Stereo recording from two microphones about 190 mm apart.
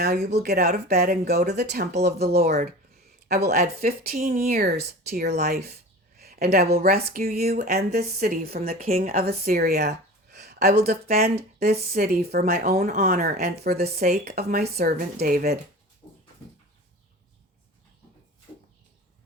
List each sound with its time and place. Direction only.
0.0 s speech: 55° right (ahead or behind)
8.7 s a woman's voice: 35° right (ahead or behind)
9.5 s speech: 55° right (ahead or behind)
10.4 s a sound: 55° right (ahead or behind)
11.1 s speech: 55° right (ahead or behind)
13.2 s speech: 55° right (ahead or behind)
13.9 s a woman's voice: 35° right (ahead or behind)
14.3 s speech: 55° right (ahead or behind)